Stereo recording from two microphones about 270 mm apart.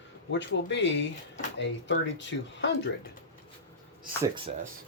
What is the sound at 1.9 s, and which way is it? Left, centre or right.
Speech, left.